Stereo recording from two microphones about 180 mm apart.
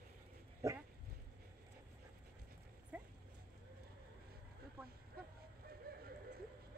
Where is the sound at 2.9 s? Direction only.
5° right (ahead or behind).